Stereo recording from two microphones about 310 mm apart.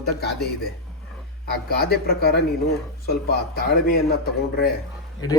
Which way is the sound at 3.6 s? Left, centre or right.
Left.